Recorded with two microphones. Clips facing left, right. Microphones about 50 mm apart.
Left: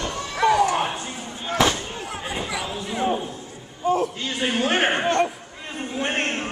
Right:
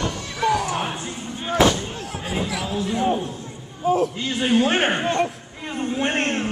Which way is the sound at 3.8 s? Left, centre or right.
Centre.